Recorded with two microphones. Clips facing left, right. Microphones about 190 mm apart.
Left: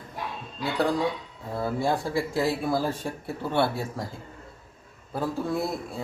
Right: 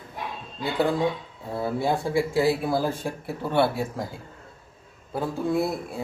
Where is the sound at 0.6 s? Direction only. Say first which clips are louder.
Right 2 dB; centre (ahead or behind).